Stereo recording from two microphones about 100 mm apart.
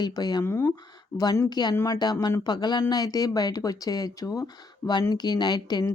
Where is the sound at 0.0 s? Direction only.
45° left (ahead or behind).